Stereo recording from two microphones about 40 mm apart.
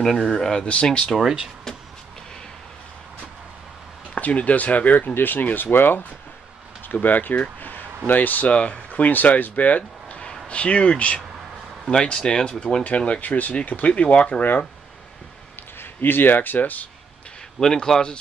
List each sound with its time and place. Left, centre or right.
0.4 s speech: centre
1.2 s speech: right
4.1 s speech: left
6.9 s speech: left
8.5 s speech: left
9.0 s a man's voice: left
13.2 s speech: left
15.8 s speech: left
17.6 s speech: centre